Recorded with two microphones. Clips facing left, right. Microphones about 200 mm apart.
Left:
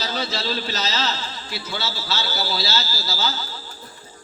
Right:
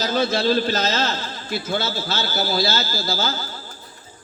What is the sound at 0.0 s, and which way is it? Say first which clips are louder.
A man's voice: right 7 dB; 50° right (ahead or behind).